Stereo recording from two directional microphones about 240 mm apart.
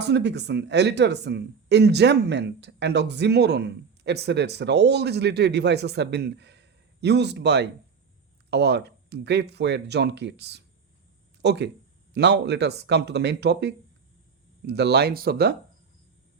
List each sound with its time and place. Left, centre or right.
0.0 s speech: right